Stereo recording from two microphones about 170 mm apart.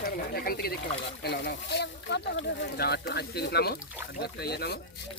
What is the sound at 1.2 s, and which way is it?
Speech, 80° left.